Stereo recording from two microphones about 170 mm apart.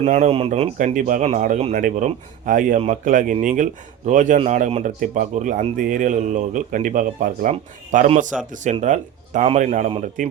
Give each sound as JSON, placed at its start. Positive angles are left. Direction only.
{"t": 0.0, "sound": "speech", "side_deg": -40}
{"t": 0.9, "sound": "speech", "side_deg": -50}